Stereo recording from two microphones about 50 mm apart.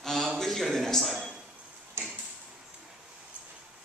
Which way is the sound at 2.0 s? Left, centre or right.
Right.